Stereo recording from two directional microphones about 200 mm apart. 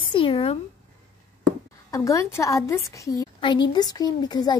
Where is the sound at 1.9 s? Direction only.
15° left (ahead or behind).